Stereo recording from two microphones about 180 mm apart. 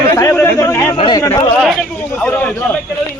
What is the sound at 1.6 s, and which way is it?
Speech, centre (ahead or behind).